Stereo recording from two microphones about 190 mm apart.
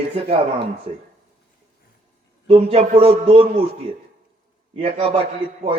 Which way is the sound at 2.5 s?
30° right (ahead or behind).